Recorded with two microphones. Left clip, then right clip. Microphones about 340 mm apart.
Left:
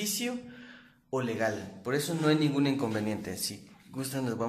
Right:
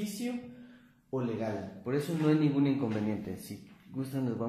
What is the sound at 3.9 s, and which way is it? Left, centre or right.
Speech, left.